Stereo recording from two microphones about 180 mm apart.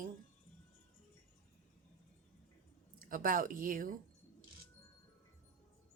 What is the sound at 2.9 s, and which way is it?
Speech, 50° right (ahead or behind).